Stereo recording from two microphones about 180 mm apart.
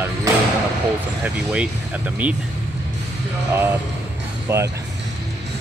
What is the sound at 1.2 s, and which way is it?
Speech, 5° right (ahead or behind).